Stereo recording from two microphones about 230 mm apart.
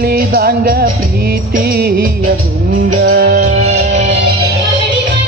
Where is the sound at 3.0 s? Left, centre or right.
Right.